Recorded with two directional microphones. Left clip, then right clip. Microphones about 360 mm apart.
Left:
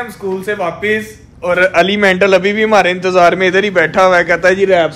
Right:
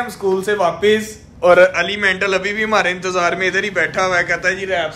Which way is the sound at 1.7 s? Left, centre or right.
Centre.